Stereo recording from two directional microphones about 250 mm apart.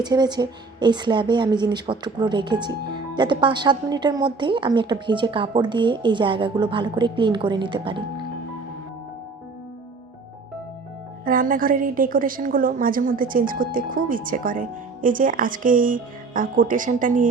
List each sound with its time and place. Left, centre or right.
0.0 s a woman's voice: centre
11.3 s speech: right